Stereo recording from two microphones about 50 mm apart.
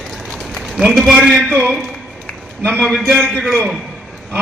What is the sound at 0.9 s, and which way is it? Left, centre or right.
Speech, centre.